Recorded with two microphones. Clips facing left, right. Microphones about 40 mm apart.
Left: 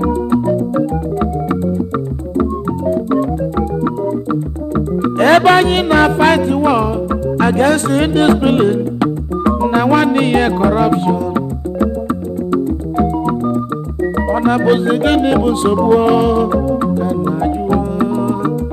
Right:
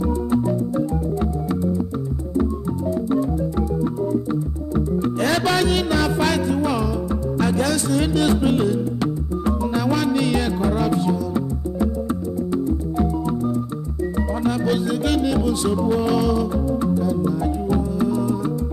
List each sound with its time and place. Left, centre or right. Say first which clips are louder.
0.0 s music: left 6 dB; left
2.9 s music: left 6 dB; left